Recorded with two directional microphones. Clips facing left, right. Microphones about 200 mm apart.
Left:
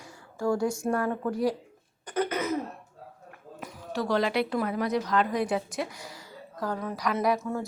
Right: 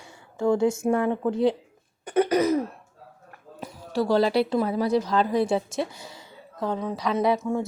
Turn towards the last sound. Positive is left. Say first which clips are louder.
# right 3 dB
turn(degrees=-25)  # may be behind; listen again after turning